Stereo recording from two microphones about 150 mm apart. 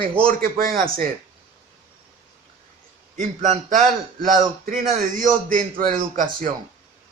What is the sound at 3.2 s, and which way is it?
Speech, 60° right (ahead or behind).